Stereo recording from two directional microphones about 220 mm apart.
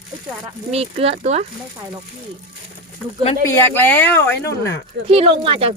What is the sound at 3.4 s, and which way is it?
Speech, 10° left (ahead or behind).